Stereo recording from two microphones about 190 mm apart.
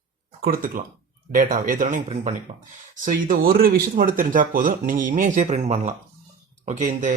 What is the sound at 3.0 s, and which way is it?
Speech, 45° right (ahead or behind).